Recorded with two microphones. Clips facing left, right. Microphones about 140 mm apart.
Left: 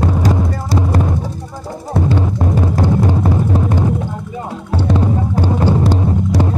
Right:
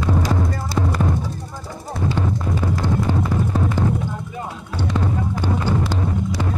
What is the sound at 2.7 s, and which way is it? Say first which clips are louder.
Music: left 4 dB; 45° left (ahead or behind).